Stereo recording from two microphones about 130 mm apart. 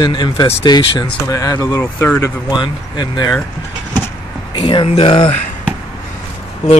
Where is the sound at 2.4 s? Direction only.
35° left (ahead or behind).